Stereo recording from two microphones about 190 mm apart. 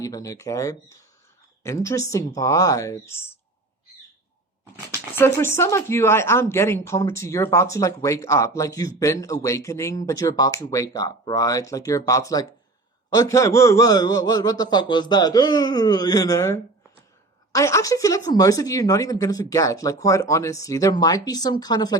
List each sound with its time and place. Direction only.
0.0 s speech: 20° left (ahead or behind)
5.1 s speech: 10° left (ahead or behind)